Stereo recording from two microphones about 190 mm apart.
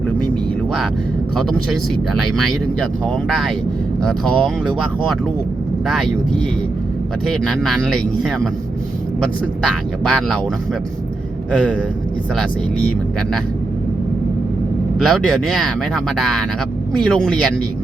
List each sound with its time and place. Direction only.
3.2 s speech: centre (ahead or behind)
7.3 s speech: centre (ahead or behind)
11.5 s speech: 5° left (ahead or behind)
14.9 s speech: centre (ahead or behind)